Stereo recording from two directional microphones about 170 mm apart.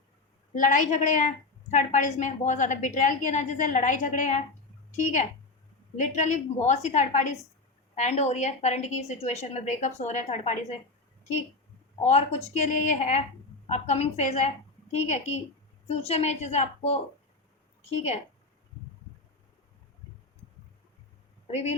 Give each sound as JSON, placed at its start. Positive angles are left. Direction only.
{"t": 0.5, "sound": "a woman's voice", "side_deg": 50}
{"t": 6.0, "sound": "a woman's voice", "side_deg": 45}
{"t": 12.0, "sound": "a woman's voice", "side_deg": 40}
{"t": 21.4, "sound": "speech", "side_deg": 40}